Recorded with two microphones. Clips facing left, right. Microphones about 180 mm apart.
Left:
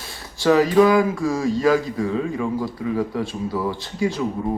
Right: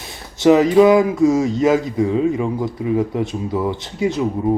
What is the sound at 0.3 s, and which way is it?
Speech, 20° right (ahead or behind).